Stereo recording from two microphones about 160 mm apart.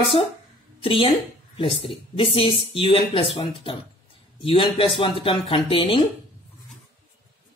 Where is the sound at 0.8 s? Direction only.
35° left (ahead or behind).